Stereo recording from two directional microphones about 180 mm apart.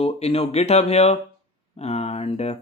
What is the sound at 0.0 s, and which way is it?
Speech, 35° left (ahead or behind).